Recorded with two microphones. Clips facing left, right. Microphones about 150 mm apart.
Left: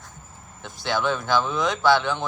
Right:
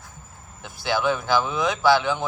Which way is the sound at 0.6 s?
5° right (ahead or behind).